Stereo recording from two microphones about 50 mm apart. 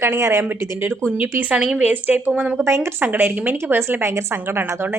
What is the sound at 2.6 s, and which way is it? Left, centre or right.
Speech, right.